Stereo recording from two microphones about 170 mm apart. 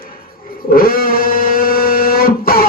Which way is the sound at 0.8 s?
60° left (ahead or behind).